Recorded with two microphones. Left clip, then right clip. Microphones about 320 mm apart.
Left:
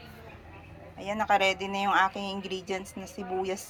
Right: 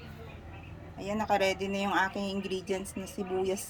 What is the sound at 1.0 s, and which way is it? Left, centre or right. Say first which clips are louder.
A woman's voice: left 3 dB; centre.